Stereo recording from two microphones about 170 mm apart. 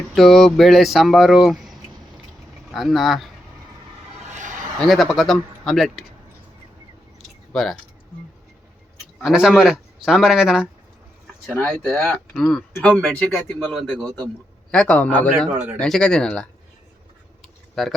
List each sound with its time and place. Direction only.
0.1 s speech: centre (ahead or behind)
4.3 s a sound: 45° right (ahead or behind)
4.8 s speech: centre (ahead or behind)
7.5 s speech: centre (ahead or behind)
9.2 s a man's voice: centre (ahead or behind)
17.4 s a sound: centre (ahead or behind)